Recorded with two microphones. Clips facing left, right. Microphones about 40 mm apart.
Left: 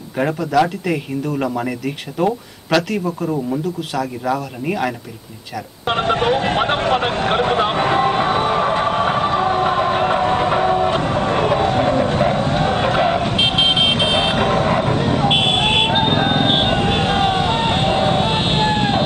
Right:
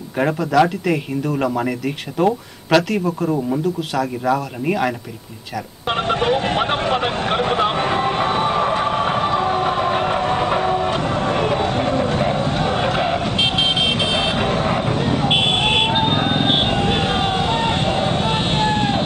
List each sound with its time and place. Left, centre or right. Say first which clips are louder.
0.2 s speech: right 1 dB; centre
5.9 s speech: left 2 dB; centre
6.2 s speech: right 1 dB; centre
6.6 s a sound: left 2 dB; centre
7.7 s music: left 3 dB; centre
12.5 s a sound: left 2 dB; centre
13.4 s vehicle: left 2 dB; left
14.4 s a sound: left 3 dB; centre
17.4 s vehicle: left 2 dB; centre